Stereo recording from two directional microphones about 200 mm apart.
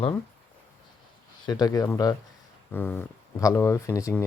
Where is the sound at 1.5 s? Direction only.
20° left (ahead or behind).